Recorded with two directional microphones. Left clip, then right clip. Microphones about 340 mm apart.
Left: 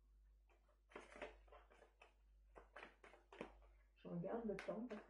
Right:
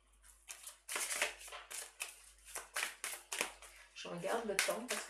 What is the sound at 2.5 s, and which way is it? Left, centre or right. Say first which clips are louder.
Clapping: right 18 dB; centre.